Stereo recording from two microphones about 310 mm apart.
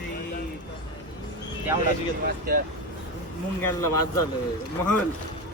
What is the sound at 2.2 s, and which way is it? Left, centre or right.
Speech, right.